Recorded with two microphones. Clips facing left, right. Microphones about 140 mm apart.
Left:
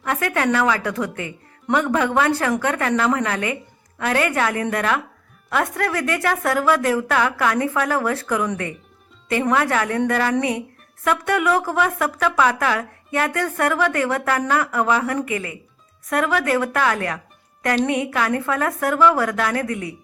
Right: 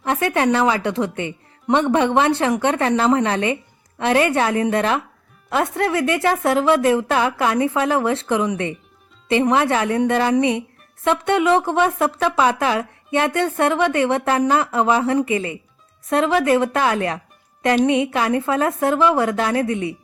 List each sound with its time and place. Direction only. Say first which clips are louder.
0.0 s a woman's voice: right 3 dB; 25° right (ahead or behind)